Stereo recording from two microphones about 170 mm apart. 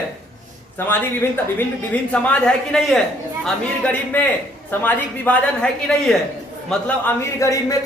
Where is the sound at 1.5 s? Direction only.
10° left (ahead or behind).